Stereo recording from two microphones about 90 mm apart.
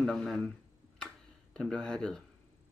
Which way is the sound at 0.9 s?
5° left (ahead or behind).